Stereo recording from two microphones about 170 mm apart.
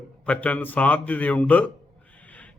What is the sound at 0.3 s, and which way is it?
A man's voice, 10° left (ahead or behind).